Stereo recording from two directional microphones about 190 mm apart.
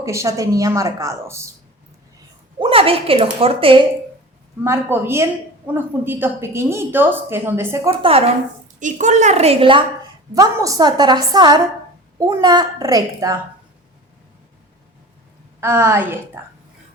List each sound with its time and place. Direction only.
0.0 s a woman's voice: 15° right (ahead or behind)
2.6 s a woman's voice: 30° right (ahead or behind)
4.6 s a woman's voice: 10° right (ahead or behind)
7.9 s a woman's voice: 30° right (ahead or behind)
8.8 s a woman's voice: 40° right (ahead or behind); by 13.4 s 15° right (ahead or behind)
15.6 s a woman's voice: 10° right (ahead or behind)